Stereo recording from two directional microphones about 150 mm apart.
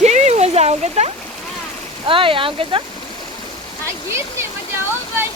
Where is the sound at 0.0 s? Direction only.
50° right (ahead or behind).